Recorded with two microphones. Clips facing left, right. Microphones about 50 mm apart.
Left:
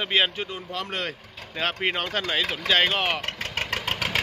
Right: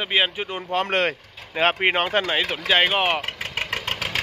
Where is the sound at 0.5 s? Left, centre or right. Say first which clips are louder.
Right 8 dB; right.